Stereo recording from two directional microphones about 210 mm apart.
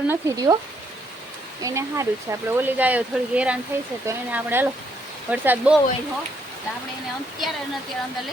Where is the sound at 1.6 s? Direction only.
15° right (ahead or behind).